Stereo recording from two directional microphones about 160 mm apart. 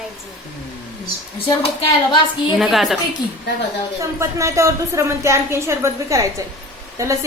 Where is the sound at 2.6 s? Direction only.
Centre (ahead or behind).